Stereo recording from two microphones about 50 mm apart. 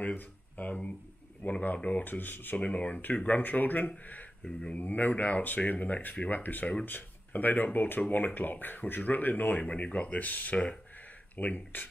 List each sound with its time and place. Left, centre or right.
0.0 s speech: left
2.5 s speech: left
3.3 s speech: left
4.5 s speech: centre
4.7 s speech: left